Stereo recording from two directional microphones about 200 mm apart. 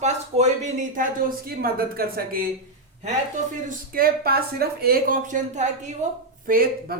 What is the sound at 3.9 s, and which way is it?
Speech, 50° right (ahead or behind).